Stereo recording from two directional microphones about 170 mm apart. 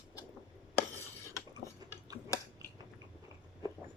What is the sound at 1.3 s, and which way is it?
Cutlery, 15° left (ahead or behind).